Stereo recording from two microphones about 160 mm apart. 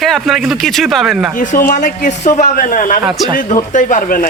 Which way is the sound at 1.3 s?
60° left (ahead or behind).